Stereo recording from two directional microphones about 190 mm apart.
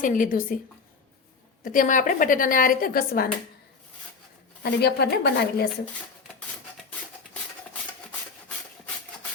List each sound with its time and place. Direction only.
0.0 s a woman's voice: 45° left (ahead or behind)
1.6 s a woman's voice: 45° left (ahead or behind)
4.6 s a woman's voice: 60° left (ahead or behind)